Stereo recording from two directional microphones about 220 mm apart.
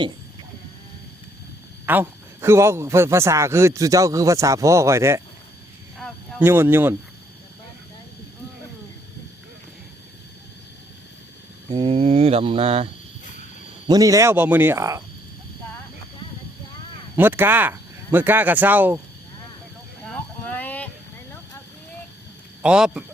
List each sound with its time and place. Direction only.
1.9 s a man's voice: 10° right (ahead or behind)
6.4 s a man's voice: 10° right (ahead or behind)
11.7 s a sound: 25° right (ahead or behind)
13.8 s a man's voice: 15° right (ahead or behind)
17.2 s a man's voice: 10° right (ahead or behind)
20.1 s a sound: 5° left (ahead or behind)
22.6 s speech: 5° right (ahead or behind)